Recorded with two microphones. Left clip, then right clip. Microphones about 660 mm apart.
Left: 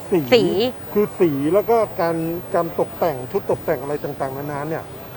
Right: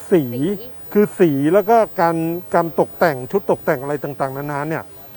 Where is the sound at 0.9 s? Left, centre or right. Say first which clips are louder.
Right 5 dB; right.